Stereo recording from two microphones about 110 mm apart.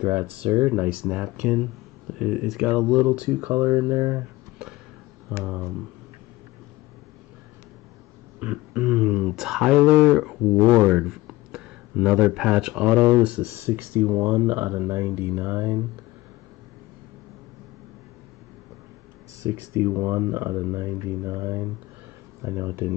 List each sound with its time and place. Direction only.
0.0 s speech: 15° right (ahead or behind)
3.0 s speech: 20° right (ahead or behind)
5.3 s speech: 5° right (ahead or behind)
8.4 s speech: 10° right (ahead or behind)
19.4 s speech: 25° right (ahead or behind)